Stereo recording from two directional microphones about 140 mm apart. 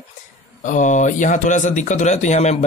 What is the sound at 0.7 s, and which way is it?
Speech, 60° left (ahead or behind).